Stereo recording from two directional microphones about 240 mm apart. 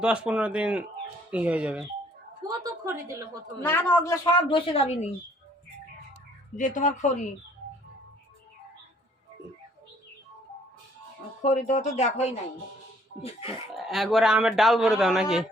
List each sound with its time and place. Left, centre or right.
0.0 s speech: centre
2.5 s a sound: centre
3.6 s a woman's voice: centre; by 5.0 s left
6.6 s speech: left
11.4 s a woman's voice: left
13.7 s speech: centre